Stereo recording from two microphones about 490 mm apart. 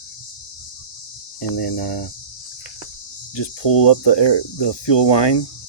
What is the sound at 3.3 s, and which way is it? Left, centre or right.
Speech, left.